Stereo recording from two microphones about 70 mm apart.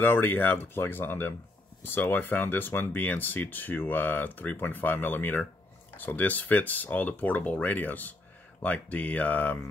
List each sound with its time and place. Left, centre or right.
0.0 s speech: left